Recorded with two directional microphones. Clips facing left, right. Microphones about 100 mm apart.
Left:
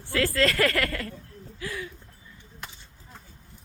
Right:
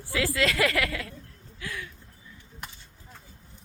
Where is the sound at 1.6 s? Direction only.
5° left (ahead or behind).